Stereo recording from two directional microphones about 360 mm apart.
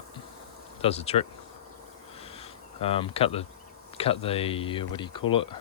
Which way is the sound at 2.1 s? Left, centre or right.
Centre.